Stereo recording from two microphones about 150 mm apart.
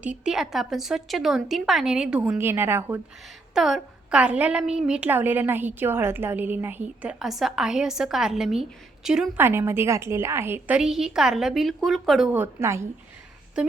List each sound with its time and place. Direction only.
0.0 s a woman's voice: 5° right (ahead or behind)
3.5 s a woman's voice: 5° right (ahead or behind)
9.4 s a woman's voice: 15° right (ahead or behind); by 12.3 s centre (ahead or behind)
12.3 s a woman's voice: 15° right (ahead or behind)
13.6 s a woman's voice: 5° right (ahead or behind)